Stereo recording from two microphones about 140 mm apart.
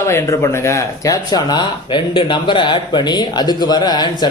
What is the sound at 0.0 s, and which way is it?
Speech, 20° left (ahead or behind).